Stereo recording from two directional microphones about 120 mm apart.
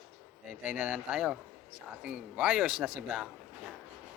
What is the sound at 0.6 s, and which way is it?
A man's voice, 10° right (ahead or behind).